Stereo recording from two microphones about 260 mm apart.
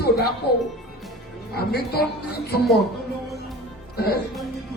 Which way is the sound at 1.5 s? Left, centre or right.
Left.